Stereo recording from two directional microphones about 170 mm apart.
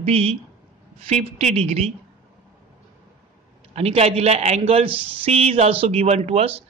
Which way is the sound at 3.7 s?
40° right (ahead or behind).